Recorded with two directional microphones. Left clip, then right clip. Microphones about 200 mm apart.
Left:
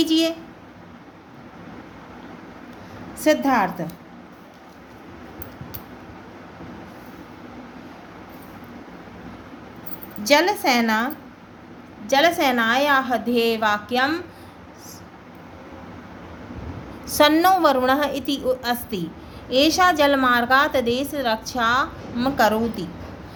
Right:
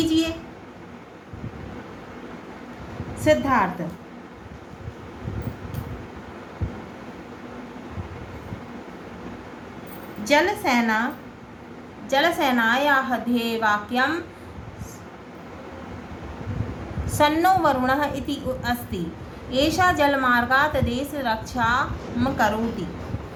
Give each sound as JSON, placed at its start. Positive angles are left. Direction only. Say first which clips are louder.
{"t": 0.0, "sound": "a sound", "louder": "left 3 dB", "side_deg": 50}
{"t": 3.2, "sound": "a woman's voice", "louder": "left 1 dB", "side_deg": 50}
{"t": 10.2, "sound": "a woman's voice", "louder": "left 2 dB", "side_deg": 50}
{"t": 17.2, "sound": "a woman's voice", "louder": "left 3 dB", "side_deg": 45}